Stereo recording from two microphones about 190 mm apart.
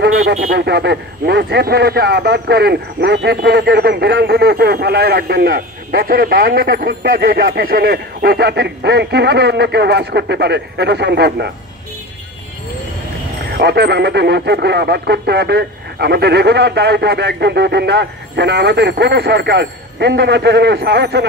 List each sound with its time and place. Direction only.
0.6 s speech: 60° right (ahead or behind)
13.6 s speech: 60° right (ahead or behind)